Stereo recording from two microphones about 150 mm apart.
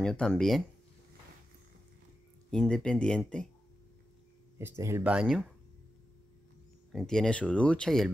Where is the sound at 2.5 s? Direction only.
5° left (ahead or behind).